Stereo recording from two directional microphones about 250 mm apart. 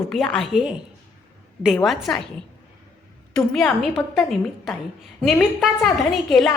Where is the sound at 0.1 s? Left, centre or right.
Centre.